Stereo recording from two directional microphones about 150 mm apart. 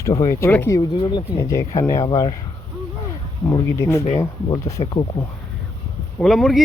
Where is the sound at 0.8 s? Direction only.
30° left (ahead or behind).